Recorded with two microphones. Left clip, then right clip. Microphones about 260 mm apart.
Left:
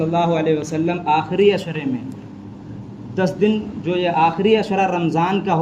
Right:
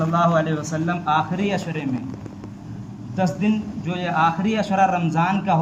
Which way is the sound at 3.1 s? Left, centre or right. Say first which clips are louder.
Left 5 dB; centre.